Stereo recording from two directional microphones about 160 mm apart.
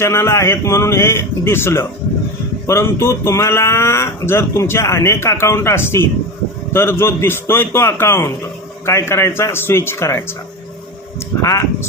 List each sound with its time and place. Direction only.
0.0 s speech: 15° left (ahead or behind)
11.4 s speech: 20° left (ahead or behind)